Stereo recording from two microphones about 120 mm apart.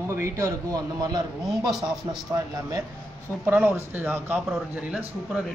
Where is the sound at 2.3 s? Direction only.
25° right (ahead or behind); by 5.4 s 5° right (ahead or behind).